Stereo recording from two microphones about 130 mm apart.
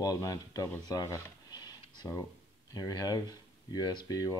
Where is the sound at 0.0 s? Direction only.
25° left (ahead or behind).